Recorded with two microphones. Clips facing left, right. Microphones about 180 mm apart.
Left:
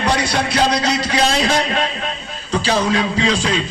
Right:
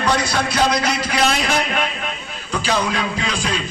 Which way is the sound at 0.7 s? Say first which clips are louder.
Left 2 dB; 35° left (ahead or behind).